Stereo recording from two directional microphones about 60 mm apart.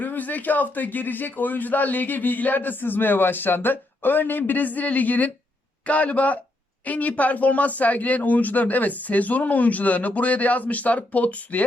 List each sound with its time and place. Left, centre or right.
0.0 s a man's voice: left